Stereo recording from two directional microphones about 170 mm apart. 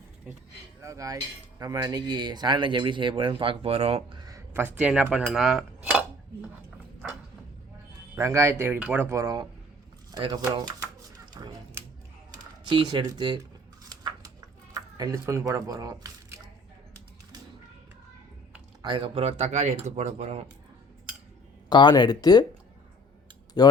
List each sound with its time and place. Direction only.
0.8 s cutlery: 20° right (ahead or behind); by 4.2 s 35° right (ahead or behind)
4.2 s speech: 20° right (ahead or behind)
5.1 s cutlery: centre (ahead or behind)
8.1 s speech: 15° right (ahead or behind)
11.3 s a sound: 25° right (ahead or behind)
12.6 s cutlery: 25° right (ahead or behind)
14.0 s a sound: 25° right (ahead or behind)
18.8 s speech: 30° right (ahead or behind)
21.7 s speech: 25° left (ahead or behind)
23.6 s speech: 25° left (ahead or behind)